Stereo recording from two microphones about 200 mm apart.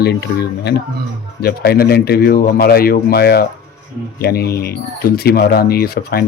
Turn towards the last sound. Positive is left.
turn(degrees=50)  # may be behind; listen again after turning